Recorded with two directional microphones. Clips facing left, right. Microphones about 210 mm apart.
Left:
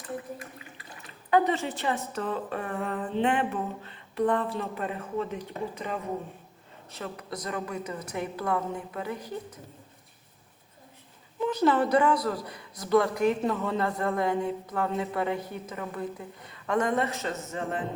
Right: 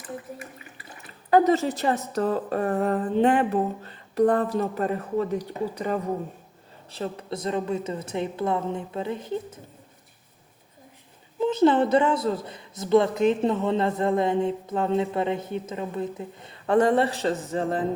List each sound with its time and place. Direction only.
1.3 s a woman's voice: 40° right (ahead or behind)
6.9 s a man's voice: 30° right (ahead or behind)
11.3 s a man's voice: 25° right (ahead or behind)